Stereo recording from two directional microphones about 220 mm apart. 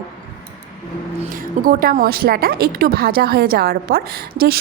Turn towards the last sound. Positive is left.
turn(degrees=-45)  # may be behind; listen again after turning